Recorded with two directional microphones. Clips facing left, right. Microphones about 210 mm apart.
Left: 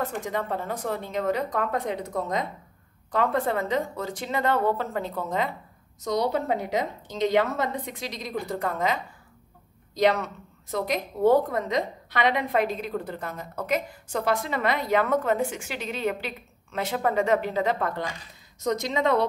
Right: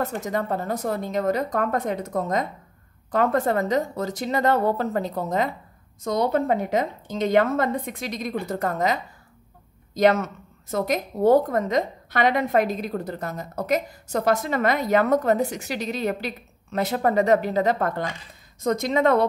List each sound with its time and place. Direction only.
0.0 s a woman's voice: 40° right (ahead or behind)